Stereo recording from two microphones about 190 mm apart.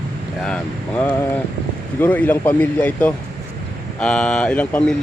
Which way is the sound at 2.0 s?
10° left (ahead or behind).